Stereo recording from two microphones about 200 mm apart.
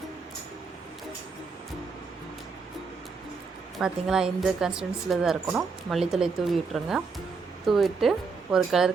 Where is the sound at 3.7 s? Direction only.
5° right (ahead or behind).